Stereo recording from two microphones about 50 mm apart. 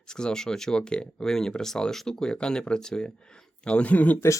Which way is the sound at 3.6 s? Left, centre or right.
Left.